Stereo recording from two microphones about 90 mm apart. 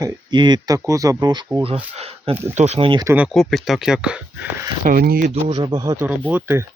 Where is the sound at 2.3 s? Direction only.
25° right (ahead or behind).